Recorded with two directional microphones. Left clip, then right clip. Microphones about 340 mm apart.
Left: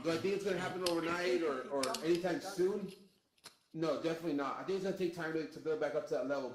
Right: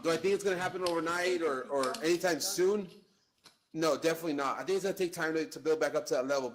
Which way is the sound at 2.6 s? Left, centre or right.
Right.